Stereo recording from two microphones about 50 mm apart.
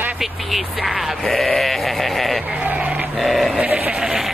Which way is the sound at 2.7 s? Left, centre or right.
Right.